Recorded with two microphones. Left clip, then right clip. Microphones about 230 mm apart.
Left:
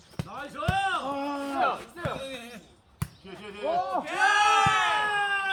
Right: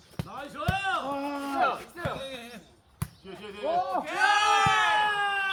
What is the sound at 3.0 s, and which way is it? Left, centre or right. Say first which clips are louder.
Basketball bounce: left 1 dB; centre.